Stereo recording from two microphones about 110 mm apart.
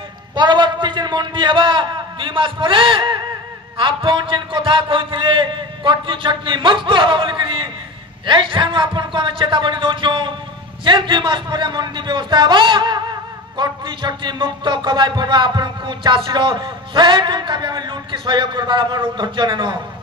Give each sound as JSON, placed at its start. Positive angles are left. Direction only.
{"t": 0.4, "sound": "a man's voice", "side_deg": -45}